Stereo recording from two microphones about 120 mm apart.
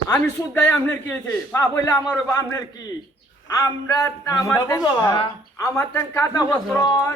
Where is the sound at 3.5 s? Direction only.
30° left (ahead or behind).